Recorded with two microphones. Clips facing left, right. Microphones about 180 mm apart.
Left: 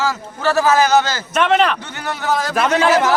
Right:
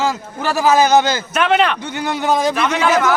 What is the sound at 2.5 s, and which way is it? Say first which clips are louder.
Speech: left 2 dB; 40° left (ahead or behind).